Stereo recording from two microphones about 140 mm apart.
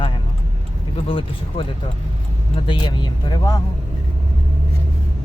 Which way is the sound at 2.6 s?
35° left (ahead or behind).